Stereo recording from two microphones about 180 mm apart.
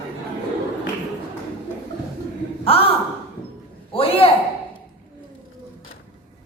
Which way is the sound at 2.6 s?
30° left (ahead or behind).